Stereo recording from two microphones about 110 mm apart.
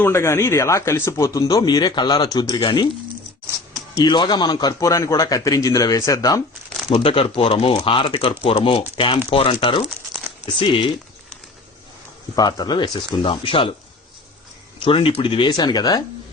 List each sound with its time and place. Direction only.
0.0 s speech: 25° left (ahead or behind)
3.9 s a man's voice: 40° left (ahead or behind)
6.9 s speech: 60° left (ahead or behind)
12.4 s a man's voice: 40° left (ahead or behind)
13.2 s speech: 50° left (ahead or behind)
14.8 s speech: 55° left (ahead or behind); by 16.0 s 40° left (ahead or behind)